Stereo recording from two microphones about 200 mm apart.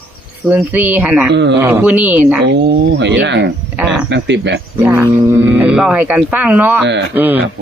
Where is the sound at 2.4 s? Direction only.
60° right (ahead or behind).